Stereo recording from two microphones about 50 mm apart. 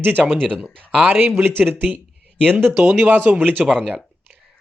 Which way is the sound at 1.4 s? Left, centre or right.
Right.